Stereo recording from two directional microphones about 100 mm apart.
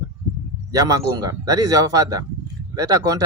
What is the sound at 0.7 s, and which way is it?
Speech, 35° right (ahead or behind).